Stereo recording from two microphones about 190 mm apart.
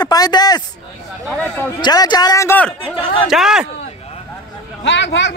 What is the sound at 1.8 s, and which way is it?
Speech, 20° left (ahead or behind).